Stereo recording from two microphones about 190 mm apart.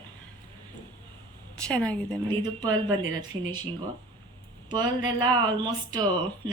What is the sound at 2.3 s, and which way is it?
Speech, 20° right (ahead or behind).